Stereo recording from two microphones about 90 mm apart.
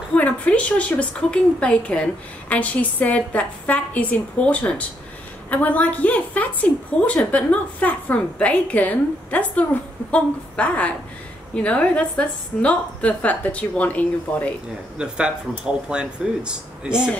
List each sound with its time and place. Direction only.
0.1 s a woman's voice: 15° left (ahead or behind)
15.0 s speech: 10° right (ahead or behind)